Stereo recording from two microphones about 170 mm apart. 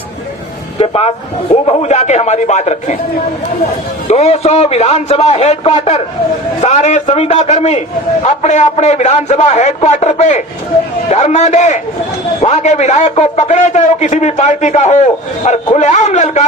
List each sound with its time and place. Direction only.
0.8 s a man's voice: 35° left (ahead or behind)
4.1 s a man's voice: 40° left (ahead or behind)